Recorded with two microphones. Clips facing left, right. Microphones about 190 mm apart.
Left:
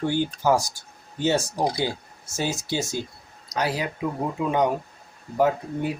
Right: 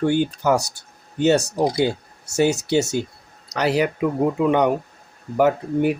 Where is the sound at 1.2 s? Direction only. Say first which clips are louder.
Right 5 dB; 70° right (ahead or behind).